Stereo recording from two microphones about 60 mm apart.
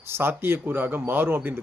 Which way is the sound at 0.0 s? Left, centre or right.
Right.